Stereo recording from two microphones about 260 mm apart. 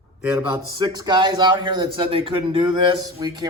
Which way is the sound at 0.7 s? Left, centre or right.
Centre.